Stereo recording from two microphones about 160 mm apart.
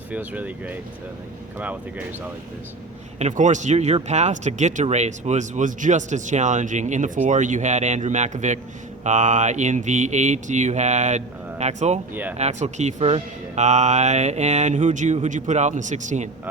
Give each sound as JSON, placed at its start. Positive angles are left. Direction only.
{"t": 0.1, "sound": "speech", "side_deg": -10}
{"t": 3.2, "sound": "speech", "side_deg": -45}